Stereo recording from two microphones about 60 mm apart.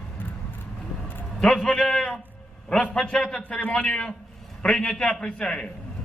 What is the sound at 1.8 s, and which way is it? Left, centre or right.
A man's voice, centre.